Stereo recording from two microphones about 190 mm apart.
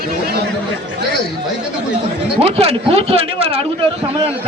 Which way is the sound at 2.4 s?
35° right (ahead or behind).